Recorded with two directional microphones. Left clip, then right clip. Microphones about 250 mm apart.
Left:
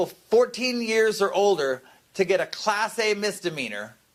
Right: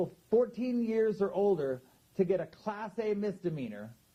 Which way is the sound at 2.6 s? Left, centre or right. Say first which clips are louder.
Left 13 dB; centre.